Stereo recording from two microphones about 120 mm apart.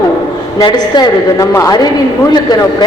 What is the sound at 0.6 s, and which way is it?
A woman's voice, 35° left (ahead or behind).